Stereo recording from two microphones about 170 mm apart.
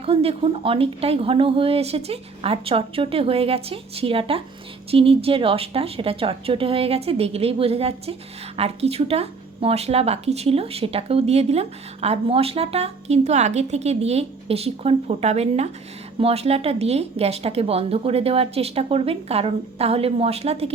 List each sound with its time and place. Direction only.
0.0 s speech: 35° right (ahead or behind)